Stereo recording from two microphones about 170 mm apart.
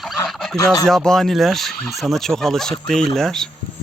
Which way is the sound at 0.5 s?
20° left (ahead or behind).